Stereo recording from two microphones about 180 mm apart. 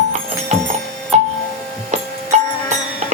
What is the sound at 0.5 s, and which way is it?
Music, 40° right (ahead or behind).